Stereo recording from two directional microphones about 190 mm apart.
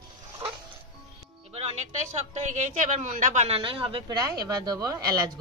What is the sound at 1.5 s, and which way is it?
Music, 35° right (ahead or behind).